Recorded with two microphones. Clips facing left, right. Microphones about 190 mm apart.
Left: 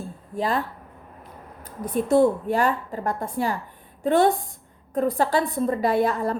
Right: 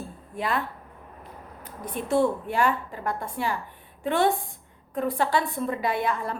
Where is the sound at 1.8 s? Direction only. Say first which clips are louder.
Left 5 dB; 40° left (ahead or behind).